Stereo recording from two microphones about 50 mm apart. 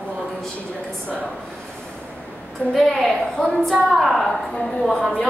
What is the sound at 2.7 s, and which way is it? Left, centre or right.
Speech, centre.